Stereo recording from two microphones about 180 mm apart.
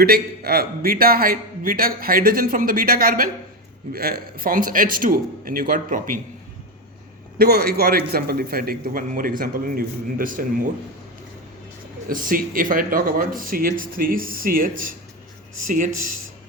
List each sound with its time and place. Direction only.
0.0 s a man's voice: 60° right (ahead or behind)
7.3 s a man's voice: 60° right (ahead or behind)
12.0 s speech: 50° right (ahead or behind)